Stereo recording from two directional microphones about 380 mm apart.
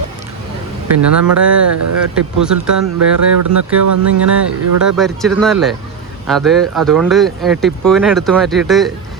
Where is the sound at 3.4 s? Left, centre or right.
Right.